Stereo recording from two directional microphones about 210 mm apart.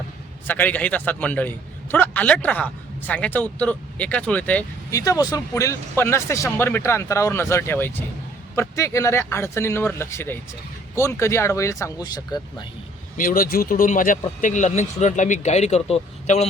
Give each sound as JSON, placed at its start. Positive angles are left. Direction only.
{"t": 0.4, "sound": "a man's voice", "side_deg": 10}
{"t": 13.1, "sound": "speech", "side_deg": 40}